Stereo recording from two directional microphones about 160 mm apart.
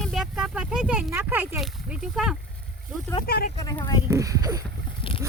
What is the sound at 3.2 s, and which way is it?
Speech, 75° left (ahead or behind).